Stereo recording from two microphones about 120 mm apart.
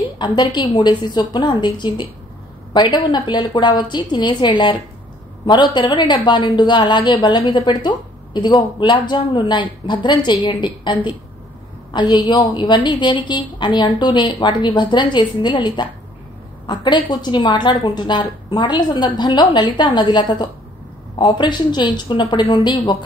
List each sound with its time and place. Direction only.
0.2 s speech: 40° left (ahead or behind)